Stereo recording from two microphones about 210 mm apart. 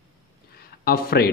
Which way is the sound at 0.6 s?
45° left (ahead or behind).